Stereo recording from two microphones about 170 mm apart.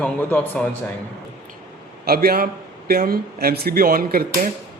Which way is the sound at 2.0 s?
65° right (ahead or behind).